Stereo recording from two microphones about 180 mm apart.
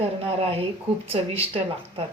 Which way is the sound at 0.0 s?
35° right (ahead or behind).